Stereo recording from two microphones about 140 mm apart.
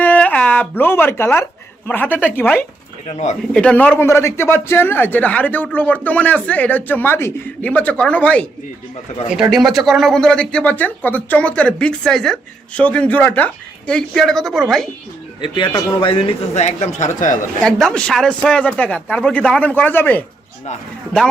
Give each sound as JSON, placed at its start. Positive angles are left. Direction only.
{"t": 0.0, "sound": "a sound", "side_deg": 10}
{"t": 1.9, "sound": "speech", "side_deg": 15}
{"t": 3.1, "sound": "speech", "side_deg": 55}
{"t": 3.5, "sound": "speech", "side_deg": 10}
{"t": 9.3, "sound": "speech", "side_deg": -5}
{"t": 15.4, "sound": "speech", "side_deg": 35}
{"t": 17.6, "sound": "speech", "side_deg": 5}